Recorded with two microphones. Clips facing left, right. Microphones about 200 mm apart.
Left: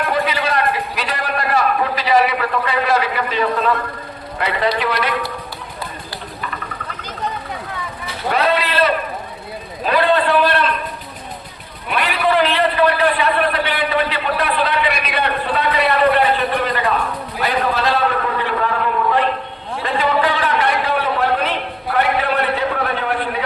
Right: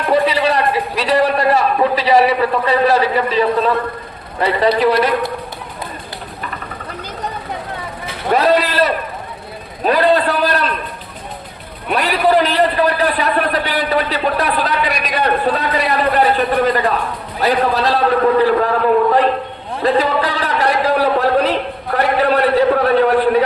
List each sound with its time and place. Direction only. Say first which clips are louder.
0.1 s a sound: right 10 dB; 35° right (ahead or behind)
4.4 s a man's voice: right 5 dB; 30° right (ahead or behind)
8.4 s a man's voice: right 3 dB; 40° right (ahead or behind)
11.9 s a man's voice: right 4 dB; 40° right (ahead or behind)
19.8 s a man's voice: right 3 dB; 35° right (ahead or behind)
21.9 s a sound: right 4 dB; 40° right (ahead or behind)